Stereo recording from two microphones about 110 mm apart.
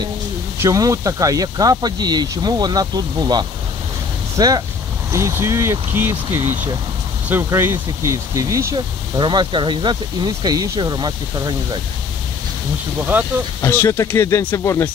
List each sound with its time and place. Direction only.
0.6 s speech: 30° right (ahead or behind)
5.1 s speech: 25° right (ahead or behind)
8.7 s speech: 45° right (ahead or behind)
13.6 s speech: 25° left (ahead or behind)